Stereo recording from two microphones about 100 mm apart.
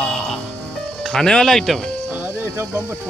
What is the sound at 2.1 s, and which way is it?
Music, 20° right (ahead or behind).